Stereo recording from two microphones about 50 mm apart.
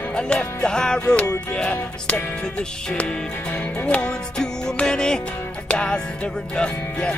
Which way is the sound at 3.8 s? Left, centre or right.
Left.